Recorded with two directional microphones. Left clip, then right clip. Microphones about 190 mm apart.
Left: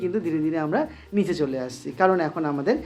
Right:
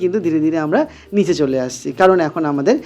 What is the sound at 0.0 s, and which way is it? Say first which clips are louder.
Speech: right 9 dB; 35° right (ahead or behind).